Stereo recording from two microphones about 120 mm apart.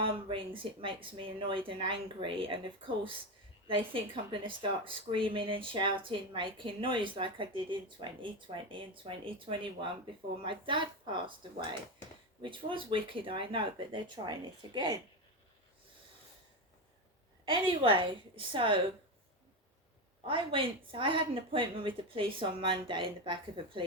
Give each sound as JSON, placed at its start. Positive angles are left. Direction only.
{"t": 0.0, "sound": "speech", "side_deg": -45}
{"t": 12.4, "sound": "speech", "side_deg": -45}
{"t": 17.4, "sound": "speech", "side_deg": -45}
{"t": 20.2, "sound": "speech", "side_deg": -45}